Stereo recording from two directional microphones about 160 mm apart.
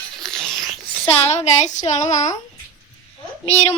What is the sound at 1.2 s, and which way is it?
Child singing, 45° left (ahead or behind).